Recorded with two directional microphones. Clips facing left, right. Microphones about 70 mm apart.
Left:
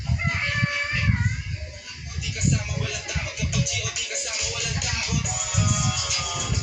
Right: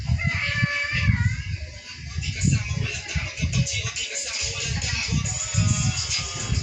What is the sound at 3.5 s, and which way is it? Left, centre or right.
Music, left.